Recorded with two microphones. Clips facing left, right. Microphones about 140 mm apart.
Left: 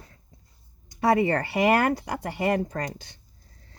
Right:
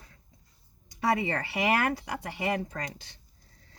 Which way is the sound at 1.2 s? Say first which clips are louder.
Left 7 dB; 50° left (ahead or behind).